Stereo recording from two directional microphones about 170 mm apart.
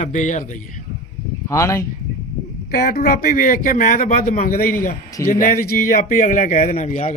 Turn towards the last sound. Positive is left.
turn(degrees=45)  # may be behind; listen again after turning